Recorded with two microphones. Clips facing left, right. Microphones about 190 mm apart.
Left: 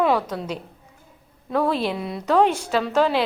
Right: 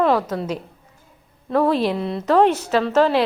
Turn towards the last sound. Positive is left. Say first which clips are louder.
# right 3 dB
turn(degrees=0)  # may be behind; listen again after turning